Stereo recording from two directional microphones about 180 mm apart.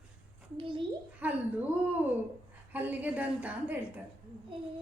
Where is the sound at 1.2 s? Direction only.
10° right (ahead or behind).